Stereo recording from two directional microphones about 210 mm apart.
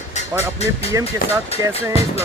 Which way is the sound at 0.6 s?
30° left (ahead or behind).